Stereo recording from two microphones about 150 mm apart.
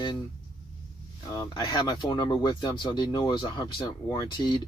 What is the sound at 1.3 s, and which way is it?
Speech, 30° left (ahead or behind).